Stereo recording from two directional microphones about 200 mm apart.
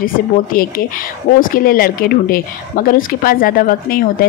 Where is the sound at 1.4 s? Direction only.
45° left (ahead or behind).